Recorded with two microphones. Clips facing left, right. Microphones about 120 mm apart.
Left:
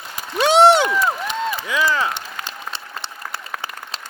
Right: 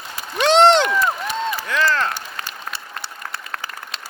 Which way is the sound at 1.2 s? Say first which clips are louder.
Even; 20° left (ahead or behind).